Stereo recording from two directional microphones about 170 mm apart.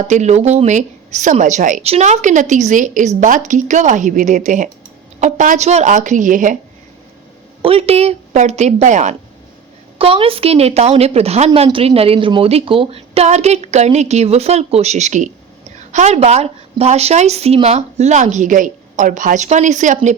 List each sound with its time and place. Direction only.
0.0 s a woman's voice: 45° right (ahead or behind)
7.6 s a woman's voice: 35° right (ahead or behind)
10.0 s a woman's voice: 35° right (ahead or behind)